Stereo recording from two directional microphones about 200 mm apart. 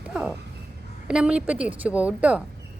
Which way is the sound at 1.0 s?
5° right (ahead or behind).